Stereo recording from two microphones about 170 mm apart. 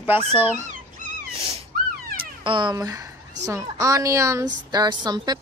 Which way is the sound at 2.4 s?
25° right (ahead or behind).